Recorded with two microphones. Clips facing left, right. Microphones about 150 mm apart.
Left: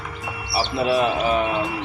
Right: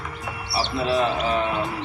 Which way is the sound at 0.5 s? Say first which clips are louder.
Left 2 dB; 15° left (ahead or behind).